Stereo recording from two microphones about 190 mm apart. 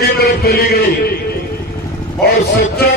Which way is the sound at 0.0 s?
55° left (ahead or behind).